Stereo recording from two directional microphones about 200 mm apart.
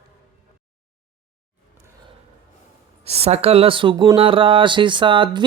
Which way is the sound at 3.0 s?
30° right (ahead or behind).